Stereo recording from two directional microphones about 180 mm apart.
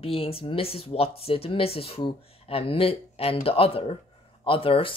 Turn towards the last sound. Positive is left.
turn(degrees=30)  # may be behind; listen again after turning